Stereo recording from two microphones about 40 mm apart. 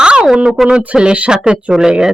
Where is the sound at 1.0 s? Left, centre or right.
Right.